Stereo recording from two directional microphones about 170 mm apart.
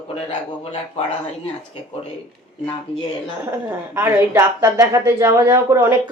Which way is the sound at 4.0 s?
10° right (ahead or behind).